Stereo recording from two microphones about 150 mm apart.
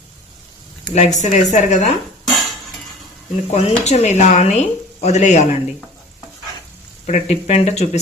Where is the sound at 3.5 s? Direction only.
50° left (ahead or behind).